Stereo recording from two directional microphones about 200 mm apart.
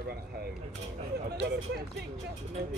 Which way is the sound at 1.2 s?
55° right (ahead or behind).